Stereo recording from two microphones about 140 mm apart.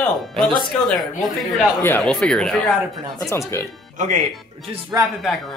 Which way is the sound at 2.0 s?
5° left (ahead or behind).